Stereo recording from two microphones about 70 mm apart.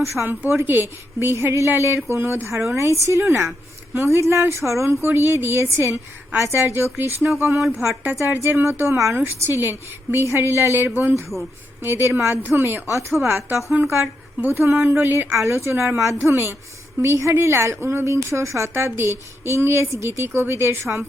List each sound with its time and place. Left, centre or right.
0.3 s a woman's voice: right
7.5 s speech: centre
8.1 s a woman's voice: right
15.4 s a woman's voice: right